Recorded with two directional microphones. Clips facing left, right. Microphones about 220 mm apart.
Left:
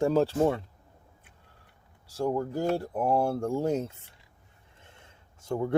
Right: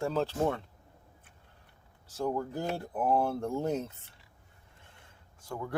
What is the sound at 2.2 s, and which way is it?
Speech, 10° left (ahead or behind).